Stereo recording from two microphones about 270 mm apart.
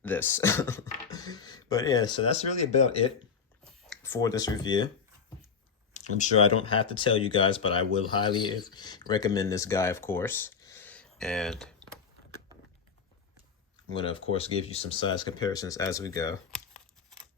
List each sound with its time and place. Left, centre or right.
0.0 s speech: centre; by 3.1 s left
3.8 s speech: centre
5.9 s speech: left; by 11.7 s centre
13.9 s speech: centre
16.5 s crumpling: centre